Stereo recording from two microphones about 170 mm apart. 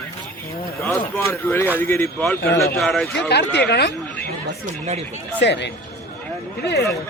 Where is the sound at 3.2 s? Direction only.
80° left.